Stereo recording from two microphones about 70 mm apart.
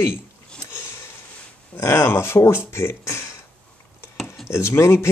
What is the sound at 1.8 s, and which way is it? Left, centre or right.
Speech, left.